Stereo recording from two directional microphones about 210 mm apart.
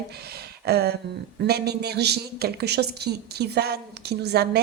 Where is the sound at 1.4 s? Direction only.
50° right (ahead or behind).